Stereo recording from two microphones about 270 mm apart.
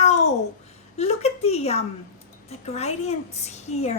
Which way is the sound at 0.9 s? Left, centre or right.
Left.